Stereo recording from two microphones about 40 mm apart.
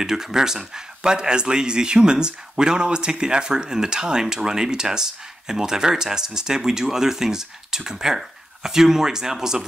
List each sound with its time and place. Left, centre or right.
0.0 s speech: centre